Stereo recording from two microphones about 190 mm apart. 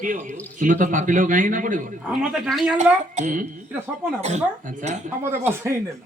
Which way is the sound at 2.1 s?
5° right (ahead or behind).